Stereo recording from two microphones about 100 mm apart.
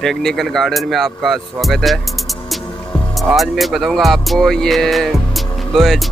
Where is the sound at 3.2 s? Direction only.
Centre (ahead or behind).